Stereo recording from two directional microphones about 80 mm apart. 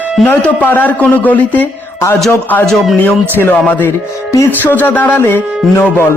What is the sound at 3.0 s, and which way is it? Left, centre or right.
Music, left.